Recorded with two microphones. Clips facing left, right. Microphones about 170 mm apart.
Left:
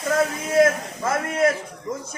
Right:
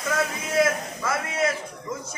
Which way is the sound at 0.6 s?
50° left (ahead or behind).